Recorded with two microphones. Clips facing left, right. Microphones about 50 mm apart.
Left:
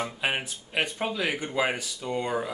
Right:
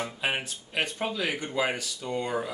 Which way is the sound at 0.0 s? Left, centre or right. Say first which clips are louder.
Left 1 dB; centre.